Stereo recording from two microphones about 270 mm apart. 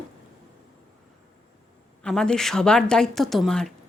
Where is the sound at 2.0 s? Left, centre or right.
Centre.